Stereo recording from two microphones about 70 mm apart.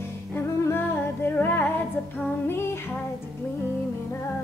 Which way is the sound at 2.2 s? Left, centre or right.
Left.